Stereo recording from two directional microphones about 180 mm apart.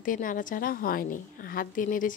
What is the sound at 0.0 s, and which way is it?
A woman's voice, 50° left (ahead or behind).